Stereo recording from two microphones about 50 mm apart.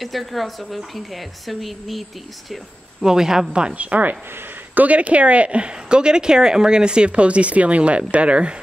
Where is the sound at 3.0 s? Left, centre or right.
Centre.